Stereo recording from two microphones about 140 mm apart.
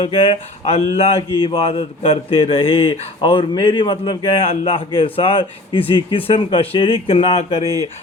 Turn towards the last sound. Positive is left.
turn(degrees=-25)  # may be behind; listen again after turning